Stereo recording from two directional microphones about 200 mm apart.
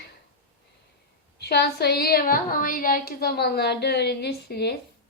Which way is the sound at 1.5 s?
55° left (ahead or behind).